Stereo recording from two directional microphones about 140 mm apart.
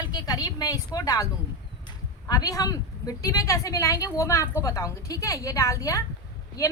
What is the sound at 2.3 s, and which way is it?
A woman's voice, 25° left (ahead or behind).